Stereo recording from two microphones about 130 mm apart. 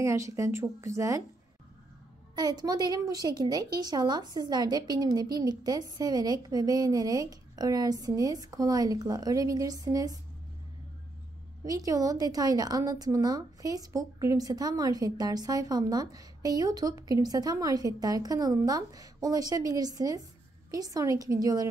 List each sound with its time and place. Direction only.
0.0 s a woman's voice: 25° right (ahead or behind)
2.3 s a woman's voice: 30° right (ahead or behind)
11.6 s a woman's voice: 30° right (ahead or behind)